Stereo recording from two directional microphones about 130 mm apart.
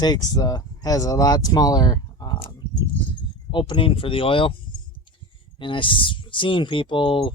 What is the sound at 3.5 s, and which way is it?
Speech, 40° left (ahead or behind).